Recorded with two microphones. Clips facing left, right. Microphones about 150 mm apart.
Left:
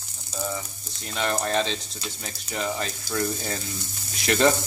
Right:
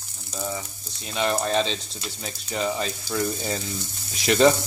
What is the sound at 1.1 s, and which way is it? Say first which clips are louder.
Speech: right 2 dB; 15° right (ahead or behind).